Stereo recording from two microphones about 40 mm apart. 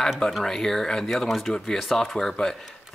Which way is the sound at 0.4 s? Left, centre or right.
Centre.